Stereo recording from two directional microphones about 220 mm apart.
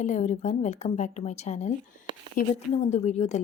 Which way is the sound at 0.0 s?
35° left (ahead or behind).